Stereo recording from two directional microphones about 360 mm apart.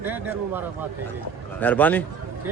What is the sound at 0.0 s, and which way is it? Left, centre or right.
Speech, centre.